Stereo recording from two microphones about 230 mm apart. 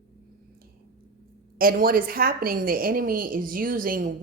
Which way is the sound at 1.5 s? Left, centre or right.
Right.